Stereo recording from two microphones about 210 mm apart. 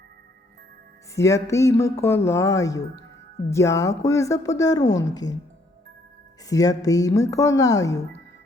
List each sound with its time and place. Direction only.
1.1 s speech: 15° left (ahead or behind)
6.5 s speech: 15° left (ahead or behind)